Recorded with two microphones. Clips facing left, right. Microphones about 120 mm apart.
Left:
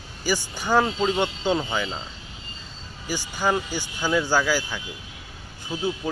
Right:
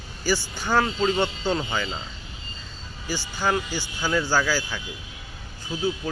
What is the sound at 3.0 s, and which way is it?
Speech, 15° left (ahead or behind).